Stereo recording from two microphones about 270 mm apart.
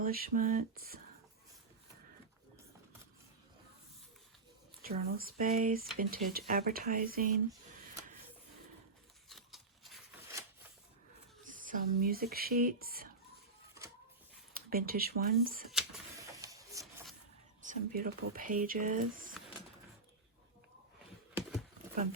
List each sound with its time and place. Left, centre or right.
0.0 s speech: right
4.8 s speech: right
9.3 s a sound: centre
11.5 s speech: right
14.5 s speech: right
15.7 s a sound: centre
16.4 s printer: centre
17.6 s speech: right